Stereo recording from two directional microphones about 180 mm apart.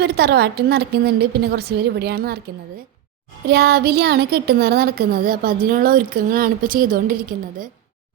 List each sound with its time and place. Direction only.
0.0 s a woman's voice: 65° right (ahead or behind)
3.5 s speech: 65° right (ahead or behind)